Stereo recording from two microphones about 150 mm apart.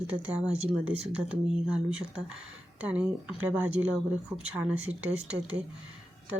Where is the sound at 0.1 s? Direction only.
10° right (ahead or behind).